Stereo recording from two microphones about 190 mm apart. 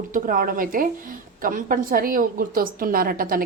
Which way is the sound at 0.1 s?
45° right (ahead or behind).